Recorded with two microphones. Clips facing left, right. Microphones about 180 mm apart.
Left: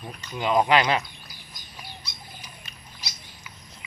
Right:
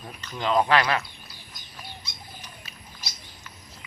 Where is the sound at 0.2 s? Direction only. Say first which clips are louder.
Left 1 dB; 10° left (ahead or behind).